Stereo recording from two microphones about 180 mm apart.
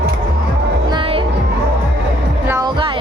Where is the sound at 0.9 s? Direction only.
25° right (ahead or behind).